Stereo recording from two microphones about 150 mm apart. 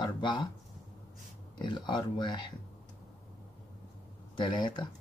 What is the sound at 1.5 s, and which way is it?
Speech, 30° left (ahead or behind).